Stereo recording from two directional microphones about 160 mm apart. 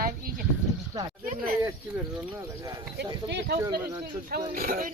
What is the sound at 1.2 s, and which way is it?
Speech, 65° right (ahead or behind).